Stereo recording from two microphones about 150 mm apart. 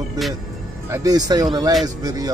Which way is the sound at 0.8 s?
20° right (ahead or behind).